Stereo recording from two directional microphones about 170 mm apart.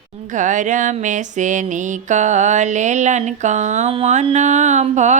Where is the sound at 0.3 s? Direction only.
45° right (ahead or behind).